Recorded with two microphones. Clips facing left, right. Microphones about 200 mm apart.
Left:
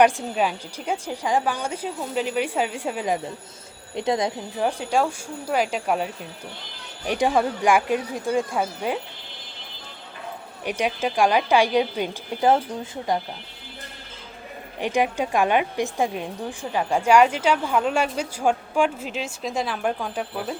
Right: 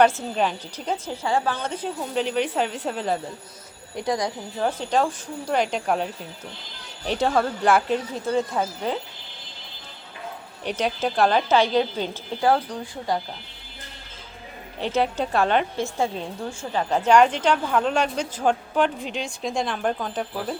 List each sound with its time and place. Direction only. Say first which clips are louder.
0.0 s a woman's voice: left 1 dB; 10° left (ahead or behind)
3.9 s speech: left 2 dB; 25° left (ahead or behind)
4.6 s a woman's voice: even; 10° left (ahead or behind)
10.6 s a woman's voice: even; 10° left (ahead or behind)
14.8 s a woman's voice: left 1 dB; 15° left (ahead or behind)